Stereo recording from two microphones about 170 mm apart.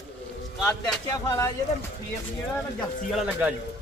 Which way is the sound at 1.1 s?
15° left (ahead or behind).